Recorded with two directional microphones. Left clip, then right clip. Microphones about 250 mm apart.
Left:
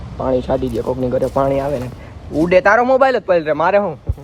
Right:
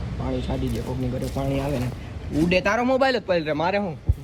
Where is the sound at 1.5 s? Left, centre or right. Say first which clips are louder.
Left 9 dB; centre.